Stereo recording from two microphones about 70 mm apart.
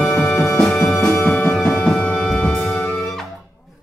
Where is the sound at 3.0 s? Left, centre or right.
Centre.